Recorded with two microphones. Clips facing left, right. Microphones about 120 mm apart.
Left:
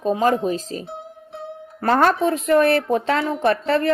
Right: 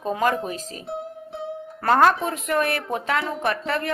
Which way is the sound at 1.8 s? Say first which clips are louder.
Left 1 dB; 35° left (ahead or behind).